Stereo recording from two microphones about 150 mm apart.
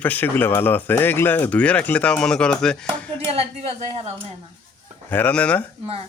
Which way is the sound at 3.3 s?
40° right (ahead or behind).